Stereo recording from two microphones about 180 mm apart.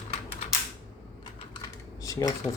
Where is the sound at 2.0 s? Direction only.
15° left (ahead or behind).